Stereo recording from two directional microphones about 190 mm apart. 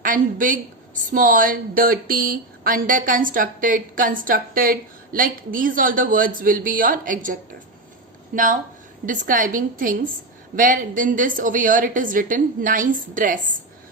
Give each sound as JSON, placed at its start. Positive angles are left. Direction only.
{"t": 0.0, "sound": "a woman's voice", "side_deg": -45}
{"t": 9.0, "sound": "speech", "side_deg": -45}